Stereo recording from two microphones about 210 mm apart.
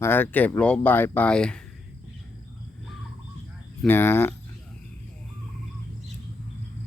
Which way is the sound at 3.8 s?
10° left (ahead or behind).